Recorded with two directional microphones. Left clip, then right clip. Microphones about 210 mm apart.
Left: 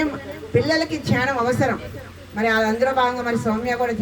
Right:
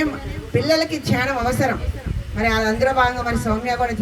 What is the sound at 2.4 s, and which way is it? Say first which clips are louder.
Speech: even; 55° right (ahead or behind).